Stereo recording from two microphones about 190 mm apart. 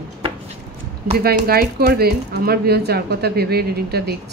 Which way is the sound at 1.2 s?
55° right (ahead or behind).